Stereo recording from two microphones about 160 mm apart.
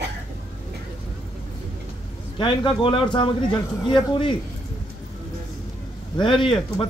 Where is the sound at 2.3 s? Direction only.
30° left (ahead or behind).